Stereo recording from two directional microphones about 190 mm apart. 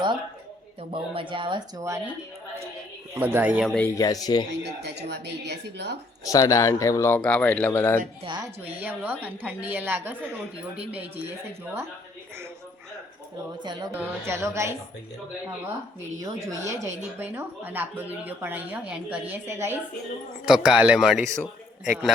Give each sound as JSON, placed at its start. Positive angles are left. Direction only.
{"t": 0.8, "sound": "speech", "side_deg": -25}
{"t": 3.2, "sound": "a woman's voice", "side_deg": -10}
{"t": 3.8, "sound": "speech", "side_deg": 15}
{"t": 4.6, "sound": "speech", "side_deg": -60}
{"t": 6.2, "sound": "speech", "side_deg": 15}
{"t": 8.2, "sound": "speech", "side_deg": -25}
{"t": 8.8, "sound": "a woman's voice", "side_deg": -10}
{"t": 13.6, "sound": "speech", "side_deg": -25}
{"t": 13.9, "sound": "a woman's voice", "side_deg": -10}
{"t": 16.2, "sound": "a woman's voice", "side_deg": -15}